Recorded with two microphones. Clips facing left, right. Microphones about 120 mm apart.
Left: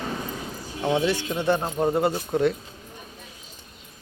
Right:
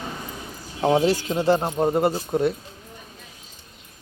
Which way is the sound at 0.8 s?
35° right (ahead or behind).